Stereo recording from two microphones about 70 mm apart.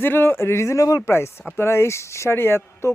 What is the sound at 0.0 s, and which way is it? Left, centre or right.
A man's voice, left.